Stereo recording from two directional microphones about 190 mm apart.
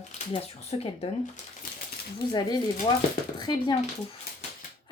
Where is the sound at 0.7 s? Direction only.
30° left (ahead or behind).